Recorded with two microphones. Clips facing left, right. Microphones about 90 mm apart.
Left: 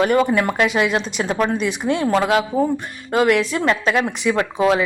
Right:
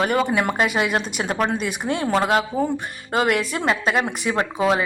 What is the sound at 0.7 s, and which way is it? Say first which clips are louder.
A woman's voice: left 3 dB; 55° right (ahead or behind).